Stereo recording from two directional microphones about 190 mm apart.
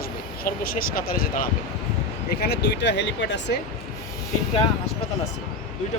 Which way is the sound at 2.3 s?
60° left (ahead or behind).